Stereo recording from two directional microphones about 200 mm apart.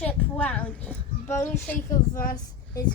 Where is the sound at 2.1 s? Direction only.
45° left (ahead or behind).